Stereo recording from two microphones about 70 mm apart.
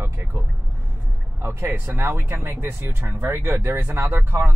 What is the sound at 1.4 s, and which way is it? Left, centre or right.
Speech, right.